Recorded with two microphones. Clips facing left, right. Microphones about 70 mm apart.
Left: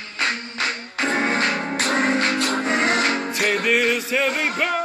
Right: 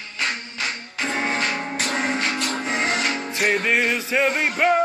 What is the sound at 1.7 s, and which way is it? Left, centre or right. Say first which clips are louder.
Music: left 4 dB; left.